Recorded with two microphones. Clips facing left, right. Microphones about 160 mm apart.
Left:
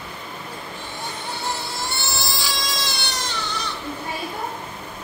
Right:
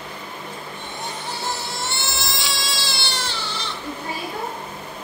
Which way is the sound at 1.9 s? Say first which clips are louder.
Even; 25° right (ahead or behind).